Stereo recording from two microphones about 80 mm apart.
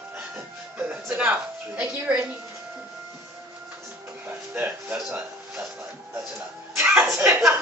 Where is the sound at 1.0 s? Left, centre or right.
Right.